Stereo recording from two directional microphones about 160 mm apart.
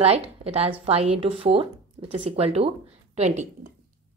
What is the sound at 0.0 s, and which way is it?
A woman's voice, 40° right (ahead or behind).